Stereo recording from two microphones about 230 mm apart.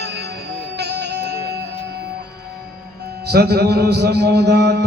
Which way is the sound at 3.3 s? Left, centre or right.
Right.